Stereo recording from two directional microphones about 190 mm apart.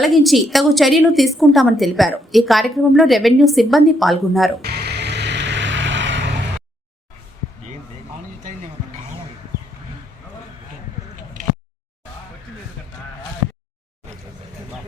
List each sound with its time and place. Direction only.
0.0 s a woman's voice: centre (ahead or behind)
4.6 s vehicle: 60° right (ahead or behind)